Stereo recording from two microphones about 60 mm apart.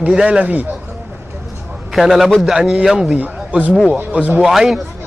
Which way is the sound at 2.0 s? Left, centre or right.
Centre.